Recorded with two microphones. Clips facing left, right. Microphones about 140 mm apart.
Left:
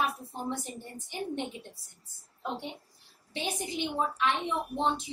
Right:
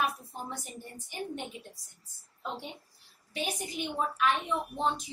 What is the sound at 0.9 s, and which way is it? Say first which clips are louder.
Speech: left 3 dB; 25° left (ahead or behind).